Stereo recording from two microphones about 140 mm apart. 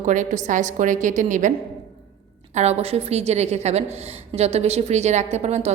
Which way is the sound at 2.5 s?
50° right (ahead or behind).